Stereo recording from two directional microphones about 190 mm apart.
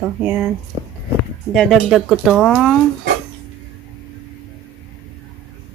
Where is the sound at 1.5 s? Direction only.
Centre (ahead or behind).